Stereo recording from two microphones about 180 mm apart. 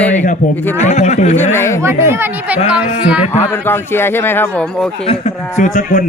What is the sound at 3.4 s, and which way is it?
A man's voice, 15° left (ahead or behind).